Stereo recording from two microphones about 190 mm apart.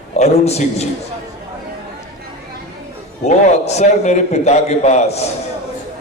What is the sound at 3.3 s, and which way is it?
A man's voice, 35° left (ahead or behind).